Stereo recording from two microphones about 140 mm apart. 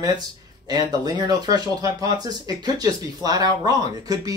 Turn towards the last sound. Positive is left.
turn(degrees=-30)  # may be behind; listen again after turning